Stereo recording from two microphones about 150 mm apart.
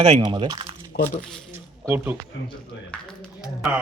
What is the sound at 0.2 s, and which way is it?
Speech, 30° right (ahead or behind).